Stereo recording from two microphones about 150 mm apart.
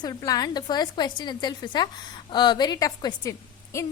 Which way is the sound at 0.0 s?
25° left (ahead or behind).